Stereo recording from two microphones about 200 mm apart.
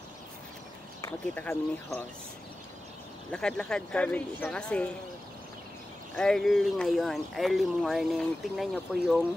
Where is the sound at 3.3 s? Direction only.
5° left (ahead or behind).